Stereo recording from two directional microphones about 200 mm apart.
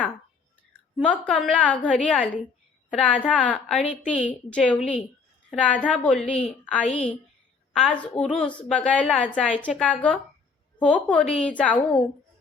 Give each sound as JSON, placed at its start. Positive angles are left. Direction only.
{"t": 0.9, "sound": "a woman's voice", "side_deg": 5}
{"t": 6.8, "sound": "a woman's voice", "side_deg": 30}
{"t": 7.7, "sound": "a woman's voice", "side_deg": 5}